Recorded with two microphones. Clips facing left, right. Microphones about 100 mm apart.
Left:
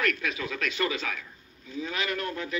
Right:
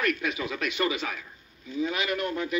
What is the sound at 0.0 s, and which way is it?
A man's voice, 20° right (ahead or behind).